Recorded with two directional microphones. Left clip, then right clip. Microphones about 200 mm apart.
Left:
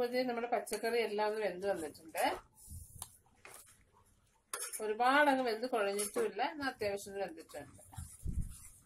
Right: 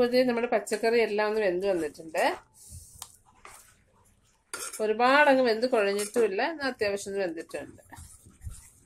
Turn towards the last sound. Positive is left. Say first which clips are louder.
# right 11 dB
turn(degrees=-40)  # may be behind; listen again after turning